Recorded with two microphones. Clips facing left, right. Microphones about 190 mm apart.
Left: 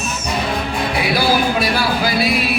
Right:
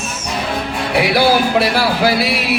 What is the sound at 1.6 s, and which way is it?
Music, 75° right (ahead or behind).